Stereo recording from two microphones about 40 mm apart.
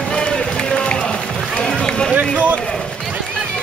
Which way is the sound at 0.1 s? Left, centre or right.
Left.